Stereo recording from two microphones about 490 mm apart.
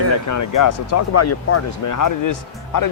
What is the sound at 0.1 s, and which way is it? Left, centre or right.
Speech, left.